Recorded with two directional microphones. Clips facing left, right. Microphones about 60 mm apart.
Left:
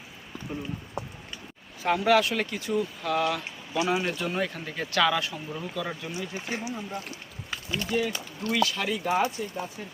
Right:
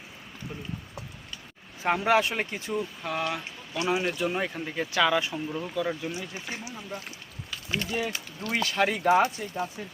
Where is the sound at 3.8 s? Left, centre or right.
Centre.